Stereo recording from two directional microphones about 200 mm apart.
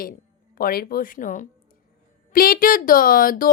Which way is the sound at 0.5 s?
45° left (ahead or behind).